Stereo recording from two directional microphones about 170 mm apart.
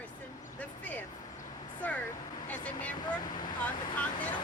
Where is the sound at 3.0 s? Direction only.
25° left (ahead or behind).